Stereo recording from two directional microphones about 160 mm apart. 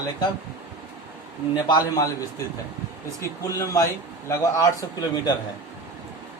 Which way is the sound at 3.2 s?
20° left (ahead or behind).